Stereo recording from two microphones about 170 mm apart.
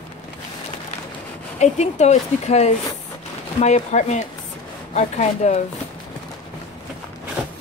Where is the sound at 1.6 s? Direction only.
40° left (ahead or behind).